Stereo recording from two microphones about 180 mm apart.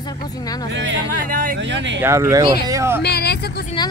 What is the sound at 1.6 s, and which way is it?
Speech, 90° right.